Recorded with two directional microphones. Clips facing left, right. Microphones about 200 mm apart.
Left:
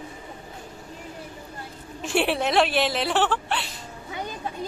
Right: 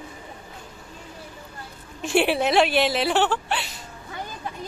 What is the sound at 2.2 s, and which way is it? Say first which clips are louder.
Speech: right 2 dB; centre (ahead or behind).